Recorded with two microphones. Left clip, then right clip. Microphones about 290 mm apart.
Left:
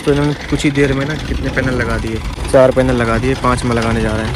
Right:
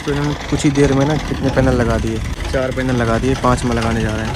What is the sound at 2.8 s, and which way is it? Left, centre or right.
Speech, centre.